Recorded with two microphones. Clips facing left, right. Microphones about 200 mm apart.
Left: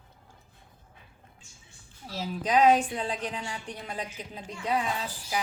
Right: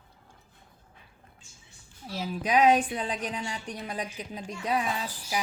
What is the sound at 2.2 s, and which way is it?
A woman's voice, 10° right (ahead or behind).